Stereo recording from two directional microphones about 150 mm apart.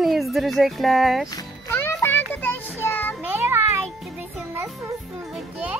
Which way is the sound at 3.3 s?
15° right (ahead or behind).